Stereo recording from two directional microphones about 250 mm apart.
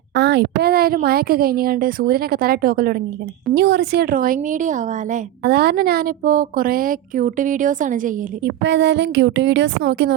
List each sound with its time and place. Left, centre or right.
0.2 s a woman's voice: right
8.6 s speech: right